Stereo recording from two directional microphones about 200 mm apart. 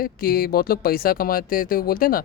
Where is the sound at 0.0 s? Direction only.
45° left (ahead or behind).